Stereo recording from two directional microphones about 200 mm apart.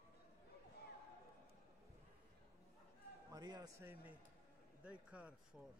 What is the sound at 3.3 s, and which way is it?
A man's voice, 20° right (ahead or behind).